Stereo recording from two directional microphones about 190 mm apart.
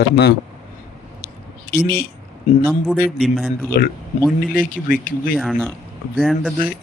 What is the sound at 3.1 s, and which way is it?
Speech, centre (ahead or behind).